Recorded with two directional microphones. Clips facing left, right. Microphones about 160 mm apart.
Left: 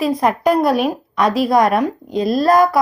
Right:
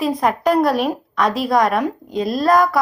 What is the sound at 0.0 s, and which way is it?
A woman's voice, centre (ahead or behind).